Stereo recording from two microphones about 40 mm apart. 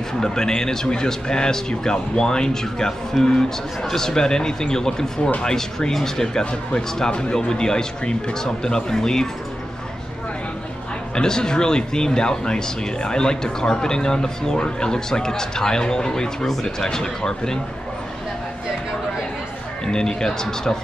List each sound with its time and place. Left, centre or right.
0.2 s speech: centre
7.1 s speech: left
11.1 s speech: centre
19.9 s speech: centre